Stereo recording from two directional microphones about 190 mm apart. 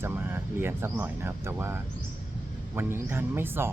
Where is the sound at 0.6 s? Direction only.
10° right (ahead or behind).